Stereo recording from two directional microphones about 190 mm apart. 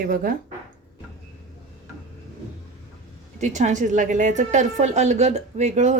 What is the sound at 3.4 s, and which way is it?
Speech, 40° right (ahead or behind).